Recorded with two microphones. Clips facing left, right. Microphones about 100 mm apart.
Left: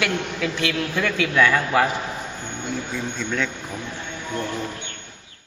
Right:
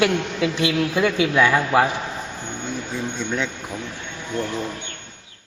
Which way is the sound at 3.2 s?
20° right (ahead or behind).